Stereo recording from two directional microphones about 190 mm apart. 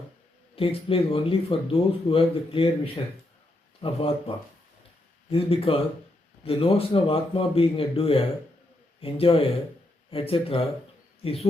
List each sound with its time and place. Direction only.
0.5 s speech: 30° left (ahead or behind)
5.3 s speech: 30° left (ahead or behind)